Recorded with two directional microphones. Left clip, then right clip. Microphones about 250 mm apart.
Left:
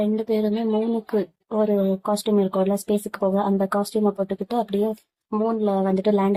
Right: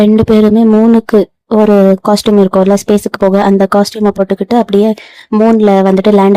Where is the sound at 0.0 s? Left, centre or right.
Right.